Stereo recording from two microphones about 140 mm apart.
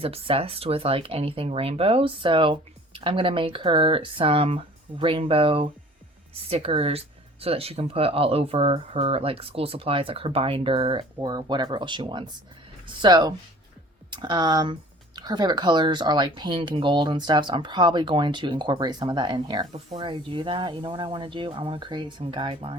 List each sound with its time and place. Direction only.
0.0 s speech: 45° right (ahead or behind)